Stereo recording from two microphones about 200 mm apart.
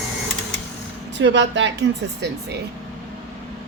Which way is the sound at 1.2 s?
65° right (ahead or behind).